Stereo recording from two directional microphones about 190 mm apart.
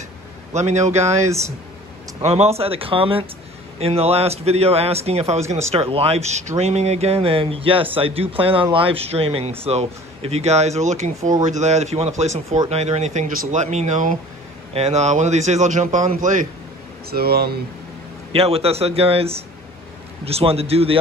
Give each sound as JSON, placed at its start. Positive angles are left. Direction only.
{"t": 0.5, "sound": "speech", "side_deg": -35}
{"t": 17.1, "sound": "speech", "side_deg": -55}
{"t": 18.3, "sound": "speech", "side_deg": -30}